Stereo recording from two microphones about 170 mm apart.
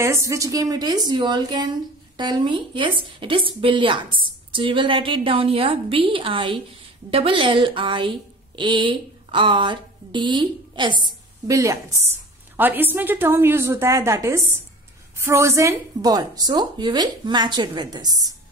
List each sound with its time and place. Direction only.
0.0 s a woman's voice: 15° right (ahead or behind)